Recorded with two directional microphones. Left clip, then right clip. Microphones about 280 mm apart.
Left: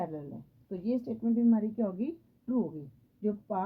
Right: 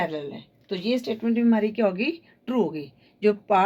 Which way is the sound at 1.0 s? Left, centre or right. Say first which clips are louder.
Right 6 dB; centre.